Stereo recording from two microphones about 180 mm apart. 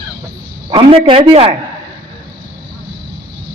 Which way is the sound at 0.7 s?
30° right (ahead or behind).